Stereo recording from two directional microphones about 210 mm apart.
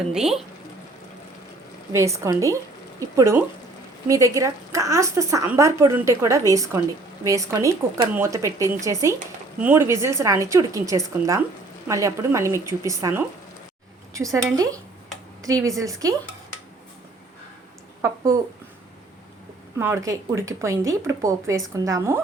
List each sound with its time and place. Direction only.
0.1 s speech: centre (ahead or behind)
1.9 s a woman's voice: 15° right (ahead or behind)
15.8 s a woman's voice: 15° right (ahead or behind)
18.0 s speech: 15° right (ahead or behind)
19.8 s a woman's voice: 15° right (ahead or behind)